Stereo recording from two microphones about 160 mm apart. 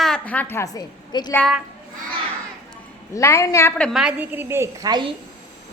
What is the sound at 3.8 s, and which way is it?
A woman's voice, centre (ahead or behind).